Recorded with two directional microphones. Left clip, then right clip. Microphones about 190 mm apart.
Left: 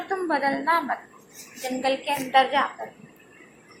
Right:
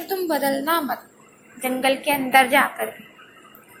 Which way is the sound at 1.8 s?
40° right (ahead or behind).